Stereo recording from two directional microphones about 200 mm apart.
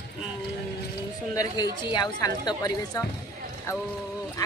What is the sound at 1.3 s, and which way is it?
Speech, 15° left (ahead or behind).